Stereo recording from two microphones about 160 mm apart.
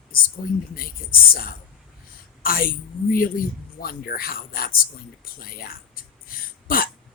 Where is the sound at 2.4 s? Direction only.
65° left (ahead or behind).